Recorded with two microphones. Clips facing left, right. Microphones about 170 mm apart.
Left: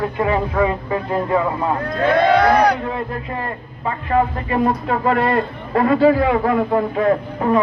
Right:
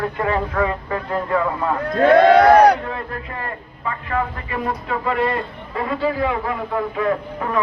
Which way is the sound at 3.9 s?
30° left (ahead or behind).